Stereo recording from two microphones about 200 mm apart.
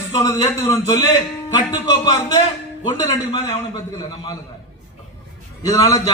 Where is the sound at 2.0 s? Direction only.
20° left (ahead or behind).